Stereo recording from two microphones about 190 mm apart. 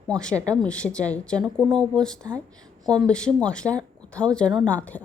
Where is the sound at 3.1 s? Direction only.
5° left (ahead or behind).